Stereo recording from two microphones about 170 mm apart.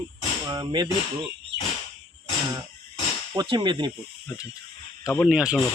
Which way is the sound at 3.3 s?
25° right (ahead or behind).